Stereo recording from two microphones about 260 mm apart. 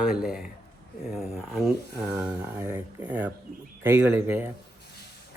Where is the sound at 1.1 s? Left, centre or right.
Centre.